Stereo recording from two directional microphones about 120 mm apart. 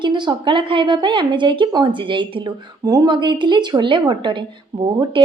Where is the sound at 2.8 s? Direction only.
30° right (ahead or behind).